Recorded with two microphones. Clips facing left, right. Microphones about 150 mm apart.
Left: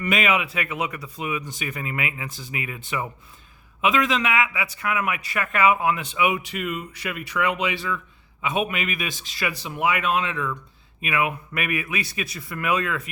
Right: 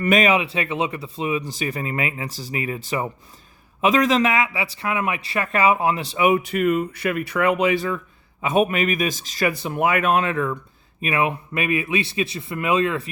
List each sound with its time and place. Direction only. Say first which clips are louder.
0.0 s a man's voice: right 5 dB; 40° right (ahead or behind)
11.0 s speech: right 3 dB; 30° right (ahead or behind)